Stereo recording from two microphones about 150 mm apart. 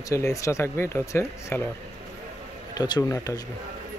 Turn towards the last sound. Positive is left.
turn(degrees=20)  # may be behind; listen again after turning